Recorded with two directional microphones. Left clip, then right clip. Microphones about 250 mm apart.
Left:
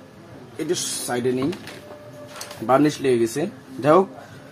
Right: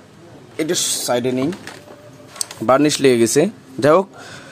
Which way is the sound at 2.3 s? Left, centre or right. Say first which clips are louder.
Right 4 dB; right.